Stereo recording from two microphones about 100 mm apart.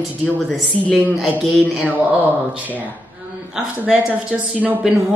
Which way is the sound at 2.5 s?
15° right (ahead or behind).